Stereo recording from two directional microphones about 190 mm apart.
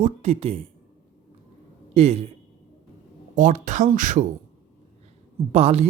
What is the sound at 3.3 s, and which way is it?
Speech, 40° right (ahead or behind).